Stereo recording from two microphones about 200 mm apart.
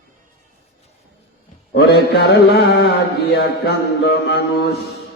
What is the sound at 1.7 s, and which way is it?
Mantra, 55° left (ahead or behind).